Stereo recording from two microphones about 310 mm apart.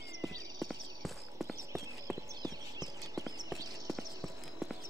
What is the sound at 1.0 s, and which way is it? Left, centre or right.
Clip-clop, centre.